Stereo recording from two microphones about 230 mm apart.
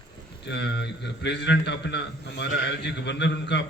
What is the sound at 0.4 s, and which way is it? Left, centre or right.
A man's voice, left.